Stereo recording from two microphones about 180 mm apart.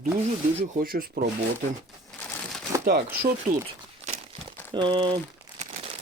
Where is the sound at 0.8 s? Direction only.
55° right (ahead or behind).